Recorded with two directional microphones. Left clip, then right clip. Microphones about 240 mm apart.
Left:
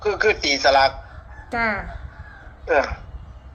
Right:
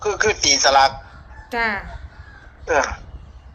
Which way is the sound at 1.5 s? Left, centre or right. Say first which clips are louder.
Right 1 dB; right.